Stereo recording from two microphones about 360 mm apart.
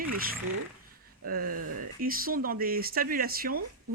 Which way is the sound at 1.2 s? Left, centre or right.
Right.